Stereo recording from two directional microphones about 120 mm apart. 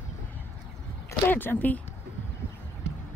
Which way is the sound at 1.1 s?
15° left (ahead or behind).